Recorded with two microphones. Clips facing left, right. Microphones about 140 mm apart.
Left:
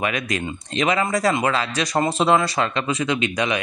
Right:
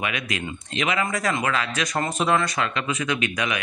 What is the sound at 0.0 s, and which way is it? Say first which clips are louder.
Speech: left 4 dB; 40° left (ahead or behind).